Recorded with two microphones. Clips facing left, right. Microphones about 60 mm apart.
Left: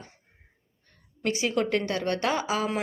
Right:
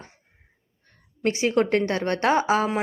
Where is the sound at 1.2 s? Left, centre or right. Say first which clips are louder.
Right 5 dB; right.